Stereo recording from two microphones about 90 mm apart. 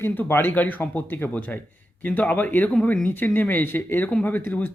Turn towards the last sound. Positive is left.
turn(degrees=20)  # may be behind; listen again after turning